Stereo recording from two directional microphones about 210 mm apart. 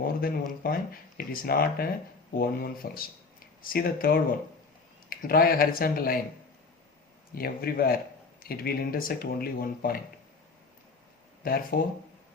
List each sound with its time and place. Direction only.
0.2 s speech: 45° left (ahead or behind)
7.3 s speech: 45° left (ahead or behind)
11.4 s speech: 45° left (ahead or behind)